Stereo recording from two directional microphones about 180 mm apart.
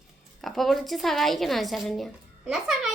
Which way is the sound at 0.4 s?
Centre (ahead or behind).